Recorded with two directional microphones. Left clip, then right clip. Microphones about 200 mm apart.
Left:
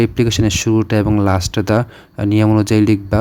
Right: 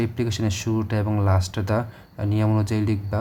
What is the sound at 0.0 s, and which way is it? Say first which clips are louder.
Speech: left 11 dB; 40° left (ahead or behind).